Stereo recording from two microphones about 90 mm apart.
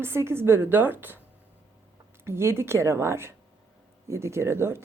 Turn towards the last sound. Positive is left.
turn(degrees=-30)  # may be behind; listen again after turning